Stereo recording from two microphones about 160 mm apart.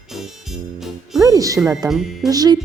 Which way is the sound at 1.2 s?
20° right (ahead or behind).